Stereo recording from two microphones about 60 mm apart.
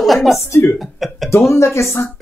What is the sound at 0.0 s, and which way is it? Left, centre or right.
Speech, centre.